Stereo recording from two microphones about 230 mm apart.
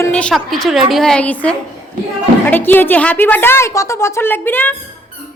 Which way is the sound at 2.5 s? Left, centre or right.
Centre.